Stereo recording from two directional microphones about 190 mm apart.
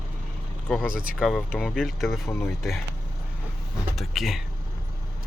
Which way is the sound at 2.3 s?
10° left (ahead or behind).